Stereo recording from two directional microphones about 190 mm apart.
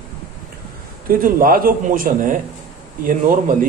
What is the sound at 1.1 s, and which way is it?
A man's voice, 50° right (ahead or behind).